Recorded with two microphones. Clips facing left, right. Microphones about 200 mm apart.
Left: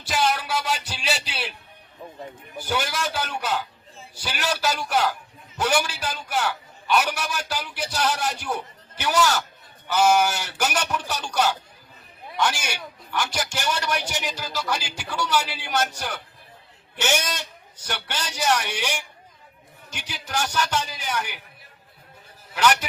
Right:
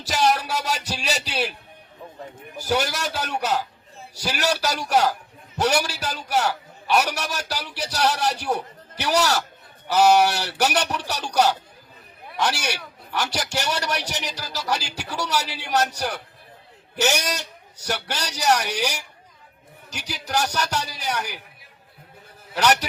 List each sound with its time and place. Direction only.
0.0 s music: 40° right (ahead or behind)
2.6 s a man's voice: 40° right (ahead or behind)
22.5 s a man's voice: 40° right (ahead or behind)